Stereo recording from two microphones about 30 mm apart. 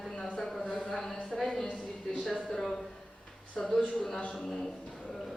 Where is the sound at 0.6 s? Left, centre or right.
Left.